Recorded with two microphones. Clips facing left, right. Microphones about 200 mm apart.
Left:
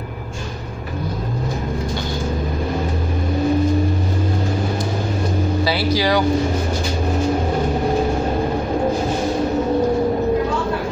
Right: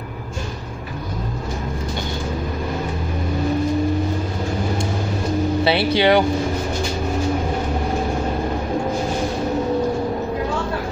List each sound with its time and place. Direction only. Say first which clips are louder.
5.6 s speech: right 2 dB; 25° right (ahead or behind)